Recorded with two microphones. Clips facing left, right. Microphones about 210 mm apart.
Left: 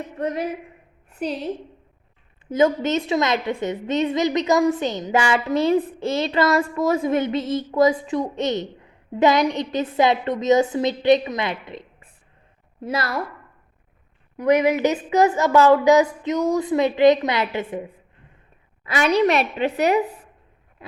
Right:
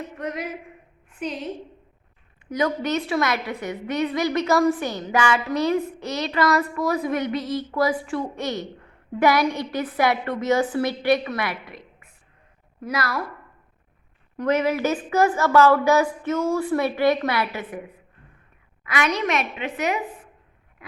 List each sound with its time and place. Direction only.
0.2 s a woman's voice: 30° left (ahead or behind)
2.5 s a woman's voice: 25° left (ahead or behind)
14.3 s a woman's voice: 15° left (ahead or behind); by 20.1 s 35° left (ahead or behind)